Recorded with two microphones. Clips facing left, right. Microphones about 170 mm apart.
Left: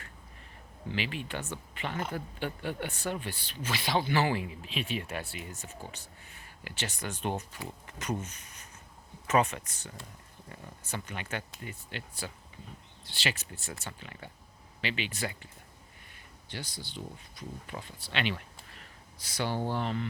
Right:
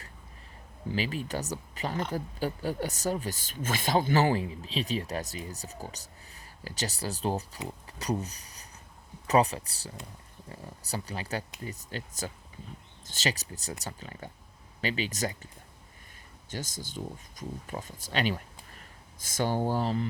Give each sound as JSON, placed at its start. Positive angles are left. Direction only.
{"t": 0.9, "sound": "speech", "side_deg": -40}
{"t": 16.5, "sound": "speech", "side_deg": -45}